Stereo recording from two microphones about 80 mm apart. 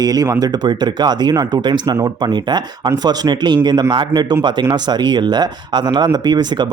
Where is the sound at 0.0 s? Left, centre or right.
Right.